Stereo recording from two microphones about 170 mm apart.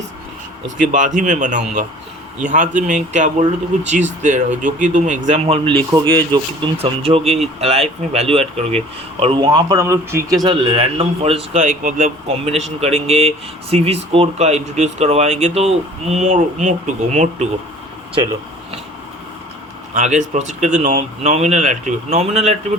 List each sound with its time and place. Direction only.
0.8 s speech: 50° right (ahead or behind)
5.5 s speech: 30° right (ahead or behind)
19.9 s speech: 45° right (ahead or behind)